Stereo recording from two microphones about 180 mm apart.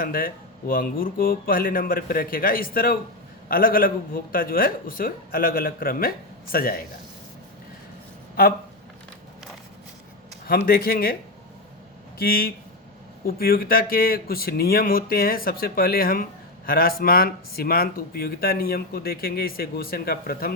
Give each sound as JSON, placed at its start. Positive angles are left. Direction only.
{"t": 0.0, "sound": "a man's voice", "side_deg": 50}
{"t": 10.7, "sound": "speech", "side_deg": 55}
{"t": 12.2, "sound": "speech", "side_deg": 55}